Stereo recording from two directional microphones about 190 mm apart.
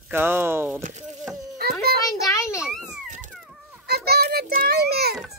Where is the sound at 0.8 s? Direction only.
40° right (ahead or behind).